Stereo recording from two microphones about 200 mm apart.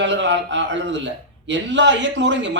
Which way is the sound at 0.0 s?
65° right (ahead or behind).